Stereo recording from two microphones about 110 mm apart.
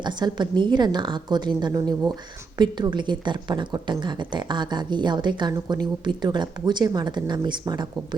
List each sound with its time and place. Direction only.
0.0 s a woman's voice: 40° right (ahead or behind)